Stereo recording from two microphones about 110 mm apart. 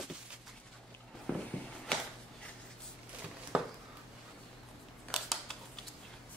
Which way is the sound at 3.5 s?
10° right (ahead or behind).